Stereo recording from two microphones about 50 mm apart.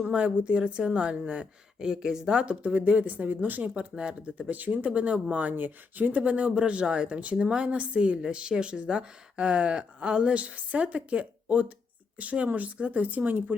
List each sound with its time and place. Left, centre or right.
0.0 s a woman's voice: right